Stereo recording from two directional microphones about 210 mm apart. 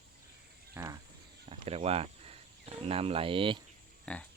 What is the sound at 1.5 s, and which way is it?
Speech, 30° right (ahead or behind).